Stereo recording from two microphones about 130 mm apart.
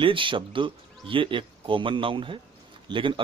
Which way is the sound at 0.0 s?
40° right (ahead or behind).